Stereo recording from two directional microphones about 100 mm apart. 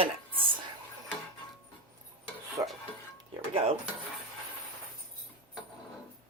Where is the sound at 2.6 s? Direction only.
30° right (ahead or behind).